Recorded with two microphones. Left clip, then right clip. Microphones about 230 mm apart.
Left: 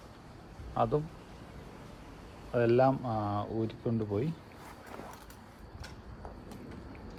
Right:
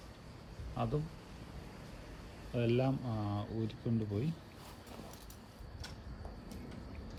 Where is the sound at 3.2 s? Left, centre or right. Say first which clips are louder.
Left 8 dB; left.